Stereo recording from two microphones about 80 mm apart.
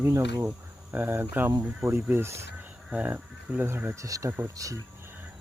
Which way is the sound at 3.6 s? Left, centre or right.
Right.